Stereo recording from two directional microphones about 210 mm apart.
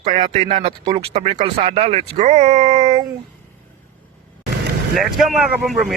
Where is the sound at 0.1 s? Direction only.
25° right (ahead or behind).